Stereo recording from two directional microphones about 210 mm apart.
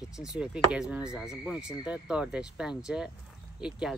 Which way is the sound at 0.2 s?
5° right (ahead or behind).